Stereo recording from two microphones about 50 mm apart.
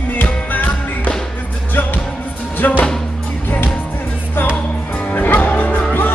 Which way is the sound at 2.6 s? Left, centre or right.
Left.